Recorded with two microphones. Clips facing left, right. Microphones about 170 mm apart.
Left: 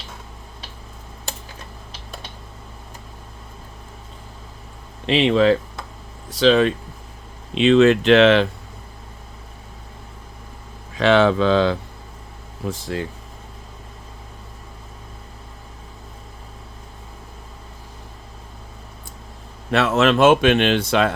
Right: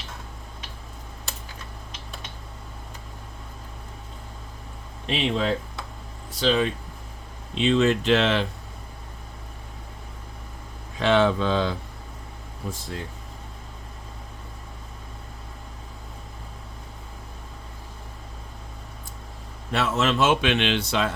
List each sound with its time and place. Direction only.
5.0 s speech: 90° left; by 8.4 s 75° left (ahead or behind)
10.9 s speech: 90° left
19.7 s speech: 75° left (ahead or behind); by 21.1 s 55° left (ahead or behind)